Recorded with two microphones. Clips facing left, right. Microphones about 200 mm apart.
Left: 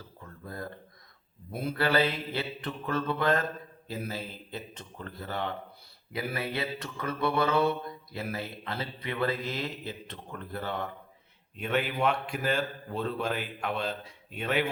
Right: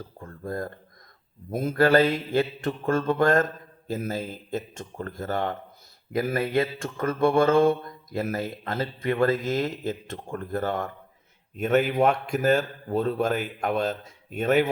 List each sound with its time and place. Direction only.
0.2 s speech: 45° right (ahead or behind)
1.5 s mantra: 45° right (ahead or behind)